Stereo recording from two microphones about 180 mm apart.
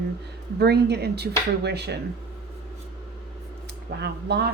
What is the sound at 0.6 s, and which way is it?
A woman's voice, 65° right (ahead or behind).